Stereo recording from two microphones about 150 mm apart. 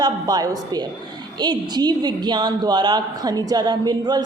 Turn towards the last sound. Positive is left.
turn(degrees=-25)  # may be behind; listen again after turning